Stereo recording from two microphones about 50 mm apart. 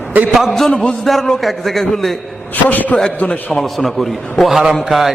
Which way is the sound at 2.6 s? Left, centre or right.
Left.